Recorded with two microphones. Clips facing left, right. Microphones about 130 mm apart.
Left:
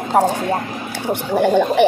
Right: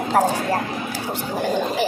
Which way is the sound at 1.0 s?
65° left (ahead or behind).